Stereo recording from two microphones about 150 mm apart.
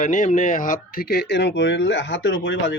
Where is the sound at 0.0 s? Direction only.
55° left (ahead or behind); by 1.4 s 90° left.